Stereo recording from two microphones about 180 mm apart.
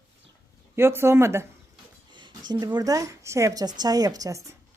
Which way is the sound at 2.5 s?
25° right (ahead or behind).